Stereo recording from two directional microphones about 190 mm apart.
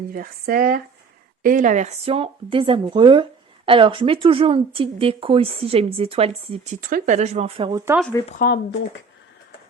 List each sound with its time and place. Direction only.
0.1 s speech: 50° right (ahead or behind); by 6.7 s 30° right (ahead or behind)
6.8 s speech: 45° right (ahead or behind); by 7.9 s 20° right (ahead or behind)
8.3 s speech: 50° left (ahead or behind)